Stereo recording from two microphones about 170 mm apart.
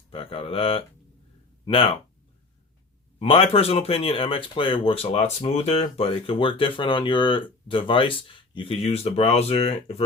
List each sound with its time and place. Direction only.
0.1 s speech: 35° left (ahead or behind)
3.2 s speech: 35° left (ahead or behind)